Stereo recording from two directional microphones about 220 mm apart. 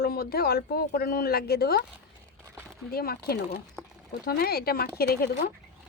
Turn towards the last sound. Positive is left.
turn(degrees=45)  # may be behind; listen again after turning